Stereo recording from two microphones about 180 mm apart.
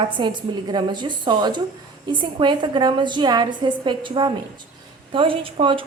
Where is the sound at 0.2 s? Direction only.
25° right (ahead or behind).